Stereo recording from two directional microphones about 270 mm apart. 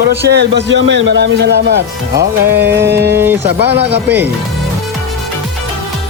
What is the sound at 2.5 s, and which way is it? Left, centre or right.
Speech, centre.